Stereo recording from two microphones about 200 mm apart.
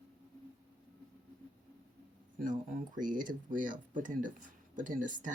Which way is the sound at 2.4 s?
40° right (ahead or behind).